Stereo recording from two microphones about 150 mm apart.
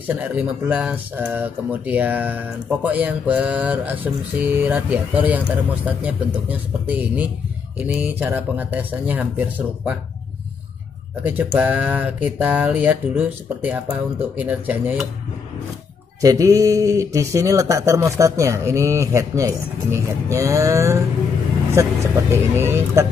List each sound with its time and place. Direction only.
0.1 s speech: 10° right (ahead or behind)
11.2 s speech: 10° right (ahead or behind)
16.2 s speech: 20° right (ahead or behind)